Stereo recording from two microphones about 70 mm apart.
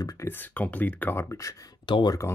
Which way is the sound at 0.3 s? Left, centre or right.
Left.